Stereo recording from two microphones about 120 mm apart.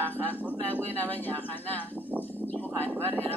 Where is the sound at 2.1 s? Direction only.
15° left (ahead or behind).